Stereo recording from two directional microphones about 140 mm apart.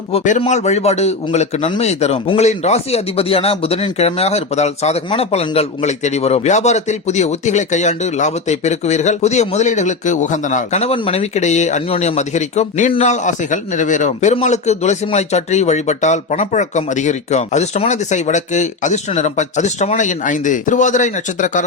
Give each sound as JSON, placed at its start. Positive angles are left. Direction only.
{"t": 0.3, "sound": "speech", "side_deg": 60}